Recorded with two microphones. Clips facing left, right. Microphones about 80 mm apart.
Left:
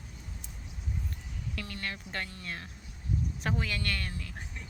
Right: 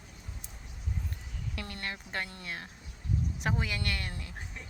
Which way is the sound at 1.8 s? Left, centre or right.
Right.